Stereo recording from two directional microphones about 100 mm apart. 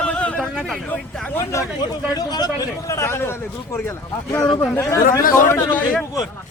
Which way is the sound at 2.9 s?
25° left (ahead or behind).